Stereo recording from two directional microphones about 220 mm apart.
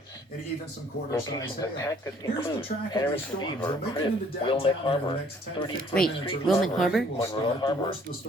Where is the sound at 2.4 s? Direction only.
25° left (ahead or behind).